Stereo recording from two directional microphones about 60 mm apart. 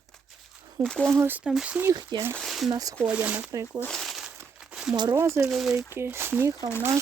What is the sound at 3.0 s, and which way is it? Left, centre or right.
Speech, right.